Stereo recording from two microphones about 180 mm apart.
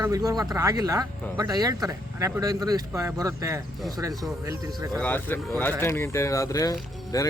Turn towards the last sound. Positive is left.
turn(degrees=20)  # may be behind; listen again after turning